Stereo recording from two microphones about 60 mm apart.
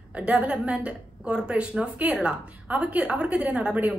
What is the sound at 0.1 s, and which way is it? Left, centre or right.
A woman's voice, right.